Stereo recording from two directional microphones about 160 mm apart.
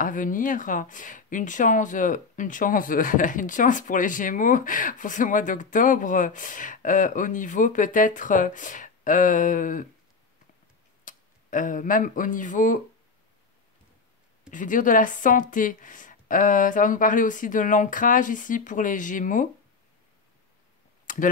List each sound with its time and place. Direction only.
0.0 s speech: 55° left (ahead or behind)
11.1 s speech: 55° left (ahead or behind)
14.5 s speech: 55° left (ahead or behind)
21.1 s clicking: 55° left (ahead or behind)